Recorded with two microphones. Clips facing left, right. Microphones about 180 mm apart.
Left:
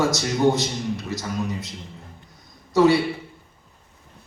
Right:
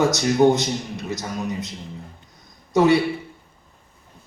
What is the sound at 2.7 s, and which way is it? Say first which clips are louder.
Speech: even; 20° right (ahead or behind).